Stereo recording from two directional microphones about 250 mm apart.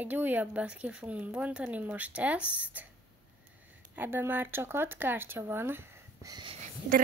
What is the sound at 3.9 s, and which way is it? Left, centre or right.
Speech, centre.